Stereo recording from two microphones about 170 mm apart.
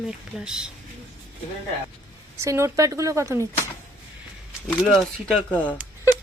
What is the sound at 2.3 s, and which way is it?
Speech, 15° right (ahead or behind).